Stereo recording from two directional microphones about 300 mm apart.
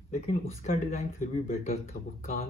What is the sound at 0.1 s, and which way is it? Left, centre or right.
Speech, left.